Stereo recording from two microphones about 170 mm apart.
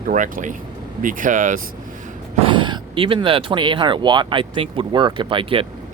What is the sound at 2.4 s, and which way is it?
Speech, 30° right (ahead or behind).